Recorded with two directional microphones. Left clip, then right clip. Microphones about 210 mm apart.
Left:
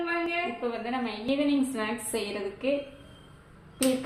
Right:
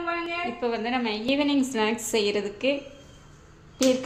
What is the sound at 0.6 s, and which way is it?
A woman's voice, 55° right (ahead or behind).